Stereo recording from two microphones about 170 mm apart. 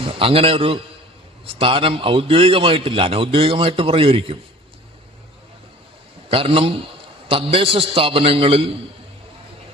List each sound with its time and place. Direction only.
0.0 s a man's voice: 30° right (ahead or behind)
6.2 s a man's voice: 35° right (ahead or behind)